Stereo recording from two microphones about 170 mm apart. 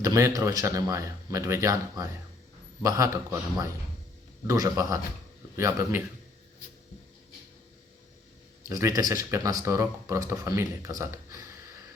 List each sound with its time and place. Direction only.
0.0 s a man's voice: 20° right (ahead or behind)
4.4 s a man's voice: 20° right (ahead or behind)
8.7 s speech: 20° right (ahead or behind)